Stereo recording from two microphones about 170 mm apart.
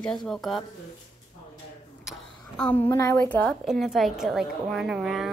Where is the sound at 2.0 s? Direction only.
5° left (ahead or behind).